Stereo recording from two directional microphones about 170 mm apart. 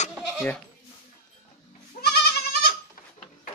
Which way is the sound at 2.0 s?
65° left (ahead or behind).